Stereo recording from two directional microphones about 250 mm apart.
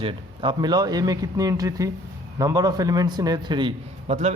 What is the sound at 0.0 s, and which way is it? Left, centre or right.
A man's voice, right.